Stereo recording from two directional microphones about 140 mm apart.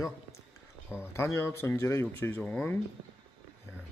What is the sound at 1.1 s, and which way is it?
Speech, 20° left (ahead or behind).